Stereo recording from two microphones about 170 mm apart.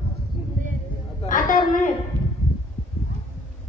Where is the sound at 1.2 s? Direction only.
50° left (ahead or behind).